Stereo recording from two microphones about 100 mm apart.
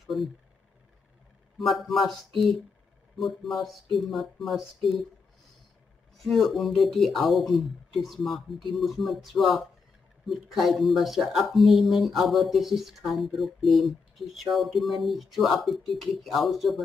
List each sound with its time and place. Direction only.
0.0 s a sound: centre (ahead or behind)
1.6 s speech: centre (ahead or behind)
6.1 s speech: centre (ahead or behind)